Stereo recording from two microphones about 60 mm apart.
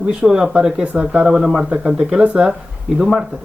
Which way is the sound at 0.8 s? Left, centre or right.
Right.